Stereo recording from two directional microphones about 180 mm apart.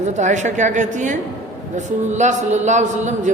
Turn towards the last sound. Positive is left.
turn(degrees=-40)  # may be behind; listen again after turning